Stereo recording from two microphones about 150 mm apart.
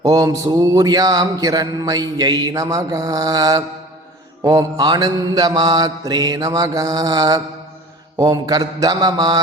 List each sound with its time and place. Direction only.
0.0 s mantra: 25° right (ahead or behind)